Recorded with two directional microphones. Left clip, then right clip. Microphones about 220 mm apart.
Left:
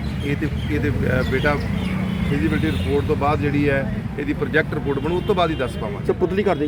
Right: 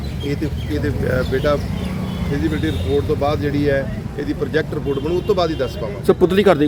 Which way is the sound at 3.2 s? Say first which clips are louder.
Right 1 dB; 10° right (ahead or behind).